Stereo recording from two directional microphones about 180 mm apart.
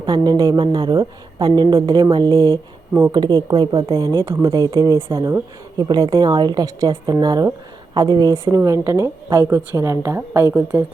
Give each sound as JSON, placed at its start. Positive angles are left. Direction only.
{"t": 0.0, "sound": "a woman's voice", "side_deg": -20}